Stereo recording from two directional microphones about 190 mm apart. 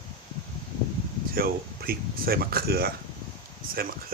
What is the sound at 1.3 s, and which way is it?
Speech, 50° right (ahead or behind).